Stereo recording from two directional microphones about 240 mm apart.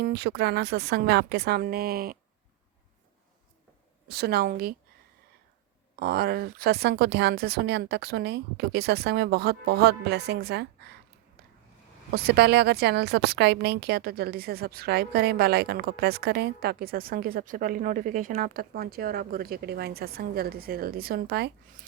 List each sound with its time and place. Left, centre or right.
0.0 s a woman's voice: right
4.1 s a woman's voice: right
6.0 s a woman's voice: right
11.4 s a sound: right
12.1 s a woman's voice: right